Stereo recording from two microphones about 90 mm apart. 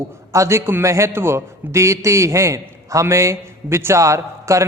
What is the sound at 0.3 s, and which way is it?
A man's voice, 30° right (ahead or behind).